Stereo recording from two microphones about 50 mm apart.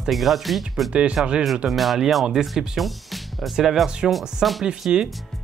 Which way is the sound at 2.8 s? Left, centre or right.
Centre.